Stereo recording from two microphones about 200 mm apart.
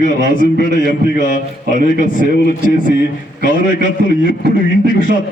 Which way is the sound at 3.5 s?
40° left (ahead or behind).